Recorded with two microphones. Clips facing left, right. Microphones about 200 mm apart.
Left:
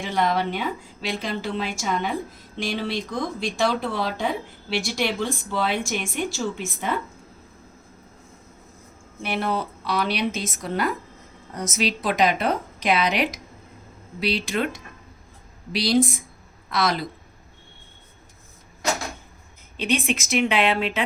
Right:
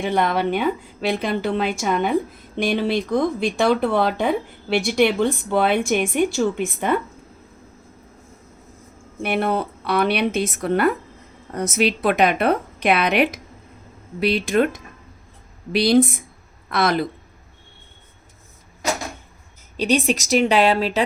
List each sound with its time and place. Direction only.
0.0 s speech: 60° right (ahead or behind)
9.2 s speech: 55° right (ahead or behind)
15.7 s speech: 60° right (ahead or behind)
19.7 s speech: 40° right (ahead or behind)